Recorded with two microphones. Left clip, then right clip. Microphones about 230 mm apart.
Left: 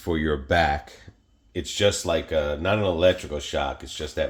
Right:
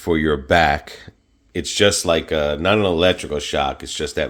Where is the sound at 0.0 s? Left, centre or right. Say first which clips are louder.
Right 7 dB; right.